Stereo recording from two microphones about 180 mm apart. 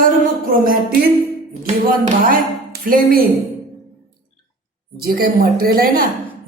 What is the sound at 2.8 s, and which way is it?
Speech, 50° right (ahead or behind).